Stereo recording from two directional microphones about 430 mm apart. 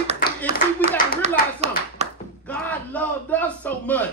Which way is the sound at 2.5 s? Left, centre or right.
Centre.